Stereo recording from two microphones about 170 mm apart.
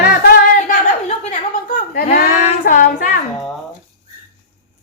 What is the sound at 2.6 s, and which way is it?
Female singing, 55° left (ahead or behind).